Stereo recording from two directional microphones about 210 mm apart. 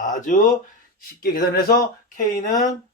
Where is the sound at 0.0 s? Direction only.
40° left (ahead or behind).